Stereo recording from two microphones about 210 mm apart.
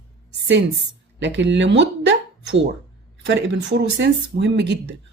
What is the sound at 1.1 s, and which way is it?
Speech, 60° right (ahead or behind).